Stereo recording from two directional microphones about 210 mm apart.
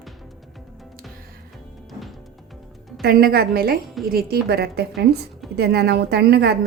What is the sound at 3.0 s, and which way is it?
A woman's voice, 45° right (ahead or behind).